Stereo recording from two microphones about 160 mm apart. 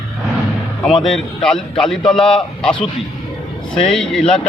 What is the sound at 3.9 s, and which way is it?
Speech, centre (ahead or behind).